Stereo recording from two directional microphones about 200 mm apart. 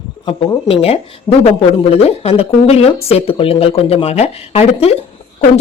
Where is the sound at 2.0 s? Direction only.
30° left (ahead or behind).